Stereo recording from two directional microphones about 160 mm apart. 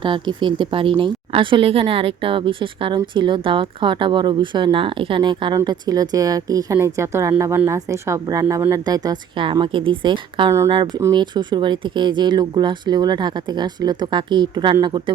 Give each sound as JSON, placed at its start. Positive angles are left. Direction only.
{"t": 0.0, "sound": "a woman's voice", "side_deg": -30}